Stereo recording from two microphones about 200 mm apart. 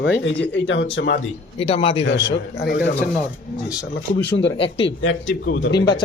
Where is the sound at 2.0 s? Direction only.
60° left (ahead or behind).